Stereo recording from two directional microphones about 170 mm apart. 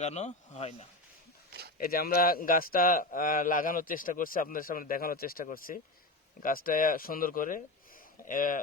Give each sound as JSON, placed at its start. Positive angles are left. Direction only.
{"t": 0.0, "sound": "speech", "side_deg": 45}
{"t": 1.8, "sound": "a man's voice", "side_deg": 60}